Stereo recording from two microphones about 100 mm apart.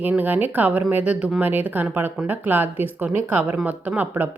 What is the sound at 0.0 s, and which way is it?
Speech, 15° right (ahead or behind).